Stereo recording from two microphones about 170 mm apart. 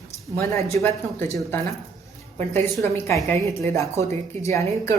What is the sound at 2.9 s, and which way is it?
A woman's voice, 15° left (ahead or behind).